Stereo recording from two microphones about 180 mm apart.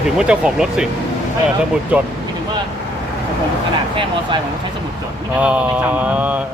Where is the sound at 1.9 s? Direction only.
10° right (ahead or behind).